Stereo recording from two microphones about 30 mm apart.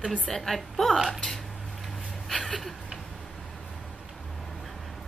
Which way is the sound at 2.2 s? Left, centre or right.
Centre.